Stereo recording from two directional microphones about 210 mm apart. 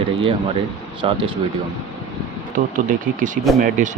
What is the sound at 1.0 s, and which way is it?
Speech, 25° right (ahead or behind).